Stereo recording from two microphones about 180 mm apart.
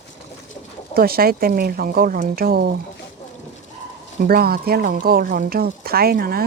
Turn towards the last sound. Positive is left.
turn(degrees=-55)  # may be behind; listen again after turning